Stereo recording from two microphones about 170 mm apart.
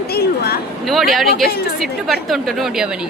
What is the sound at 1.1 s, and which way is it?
Speech, centre (ahead or behind).